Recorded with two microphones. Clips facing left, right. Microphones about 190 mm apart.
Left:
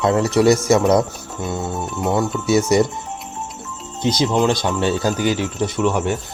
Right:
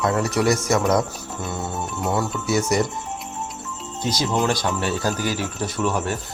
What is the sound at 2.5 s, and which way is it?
Speech, 25° left (ahead or behind).